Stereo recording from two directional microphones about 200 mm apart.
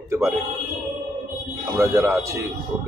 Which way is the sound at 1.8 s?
15° right (ahead or behind).